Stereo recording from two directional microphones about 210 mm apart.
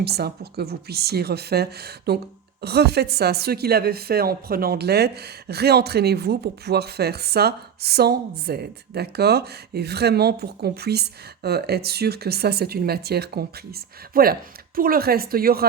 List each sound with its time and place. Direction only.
0.0 s a woman's voice: 50° right (ahead or behind)